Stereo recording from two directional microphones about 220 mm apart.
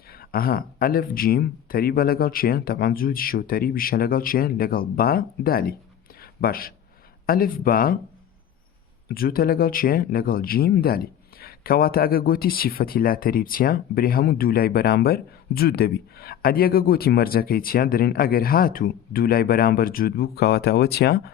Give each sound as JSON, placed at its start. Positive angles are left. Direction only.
{"t": 0.1, "sound": "speech", "side_deg": 40}
{"t": 9.0, "sound": "speech", "side_deg": 40}